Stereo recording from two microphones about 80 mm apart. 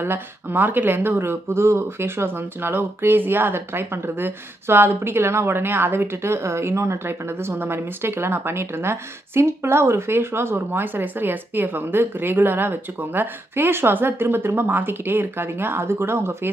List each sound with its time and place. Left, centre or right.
0.0 s speech: right